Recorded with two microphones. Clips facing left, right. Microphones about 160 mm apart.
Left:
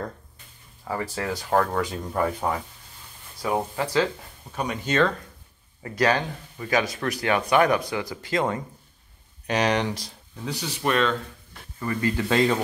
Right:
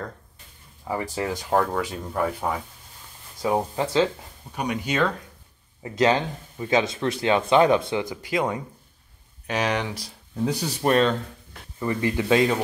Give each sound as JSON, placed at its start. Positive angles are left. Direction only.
{"t": 0.8, "sound": "speech", "side_deg": -15}
{"t": 3.4, "sound": "speech", "side_deg": -25}
{"t": 4.6, "sound": "speech", "side_deg": -10}
{"t": 10.4, "sound": "speech", "side_deg": -35}
{"t": 11.8, "sound": "speech", "side_deg": -20}